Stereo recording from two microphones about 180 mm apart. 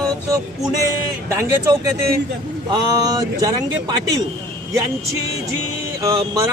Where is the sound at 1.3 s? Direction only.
15° right (ahead or behind).